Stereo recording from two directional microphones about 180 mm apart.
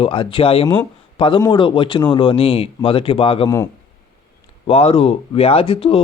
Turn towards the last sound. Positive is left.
turn(degrees=30)  # may be behind; listen again after turning